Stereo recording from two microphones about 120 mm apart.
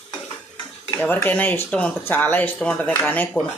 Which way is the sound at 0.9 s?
15° left (ahead or behind).